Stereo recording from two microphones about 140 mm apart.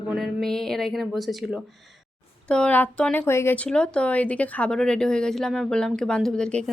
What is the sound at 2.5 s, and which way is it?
A woman's voice, 10° left (ahead or behind).